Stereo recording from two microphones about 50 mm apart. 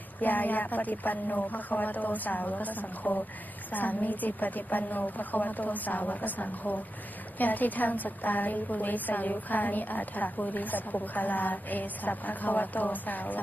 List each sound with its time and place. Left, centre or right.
0.2 s a woman's voice: left